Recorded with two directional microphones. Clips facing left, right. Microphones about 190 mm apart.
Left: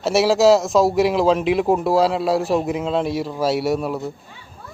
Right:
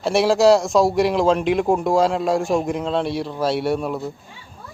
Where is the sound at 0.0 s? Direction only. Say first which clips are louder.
Even; 5° left (ahead or behind).